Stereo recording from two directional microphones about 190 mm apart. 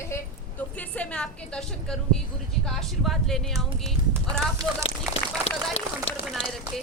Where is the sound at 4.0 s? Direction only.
25° right (ahead or behind).